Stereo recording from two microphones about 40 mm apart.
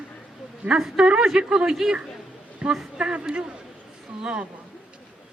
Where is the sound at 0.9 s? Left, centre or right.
Right.